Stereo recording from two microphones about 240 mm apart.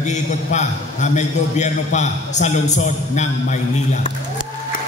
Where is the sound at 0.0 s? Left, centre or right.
Left.